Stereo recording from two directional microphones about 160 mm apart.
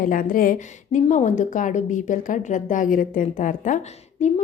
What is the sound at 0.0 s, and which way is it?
A woman's voice, 60° left (ahead or behind).